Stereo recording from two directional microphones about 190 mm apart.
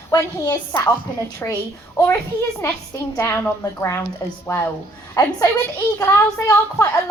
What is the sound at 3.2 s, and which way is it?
A woman's voice, 10° left (ahead or behind).